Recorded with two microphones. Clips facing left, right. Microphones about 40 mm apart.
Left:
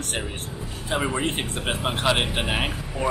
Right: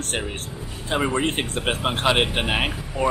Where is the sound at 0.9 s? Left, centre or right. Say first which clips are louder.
Right 3 dB; centre.